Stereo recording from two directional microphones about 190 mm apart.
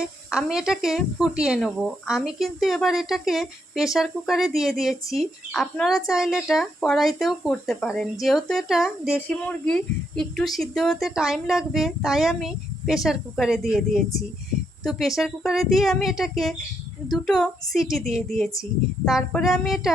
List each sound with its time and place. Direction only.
0.3 s speech: 5° right (ahead or behind)